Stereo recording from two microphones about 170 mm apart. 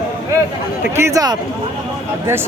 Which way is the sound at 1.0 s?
20° right (ahead or behind).